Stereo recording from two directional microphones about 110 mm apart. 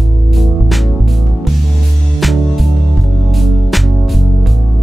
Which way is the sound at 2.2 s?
Centre (ahead or behind).